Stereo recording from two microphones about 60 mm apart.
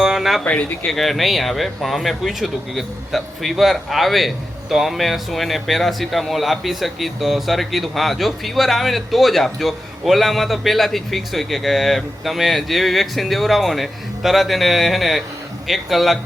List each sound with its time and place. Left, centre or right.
0.0 s a sound: centre
0.4 s speech: left
0.9 s speech: centre